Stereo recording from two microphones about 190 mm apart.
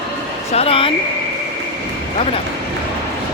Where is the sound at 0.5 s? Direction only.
30° left (ahead or behind).